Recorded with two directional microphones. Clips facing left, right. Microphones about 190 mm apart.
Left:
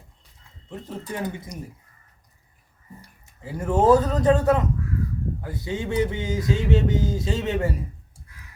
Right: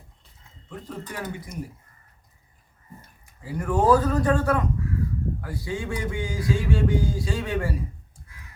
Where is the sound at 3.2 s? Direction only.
25° left (ahead or behind).